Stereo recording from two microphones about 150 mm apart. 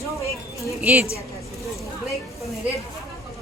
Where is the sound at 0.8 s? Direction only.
10° right (ahead or behind).